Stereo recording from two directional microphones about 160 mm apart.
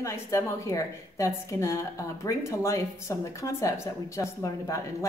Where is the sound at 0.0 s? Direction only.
20° left (ahead or behind).